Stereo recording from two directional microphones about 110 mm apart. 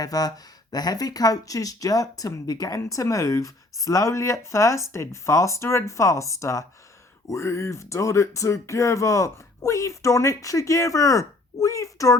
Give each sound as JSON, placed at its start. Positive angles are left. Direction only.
{"t": 0.0, "sound": "speech", "side_deg": 35}